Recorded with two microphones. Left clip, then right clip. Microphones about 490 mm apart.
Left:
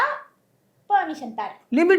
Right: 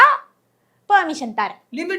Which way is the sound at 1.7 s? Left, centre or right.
Left.